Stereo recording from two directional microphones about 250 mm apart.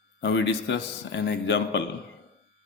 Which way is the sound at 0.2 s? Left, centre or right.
Left.